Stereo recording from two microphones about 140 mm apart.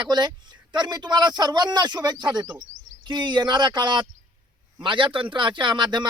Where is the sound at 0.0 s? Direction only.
30° right (ahead or behind).